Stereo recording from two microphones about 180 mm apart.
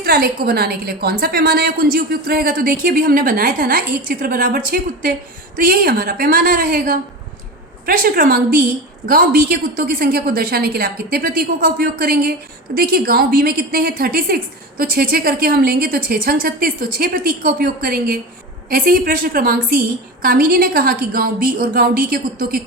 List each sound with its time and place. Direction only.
0.0 s a woman's voice: 60° right (ahead or behind)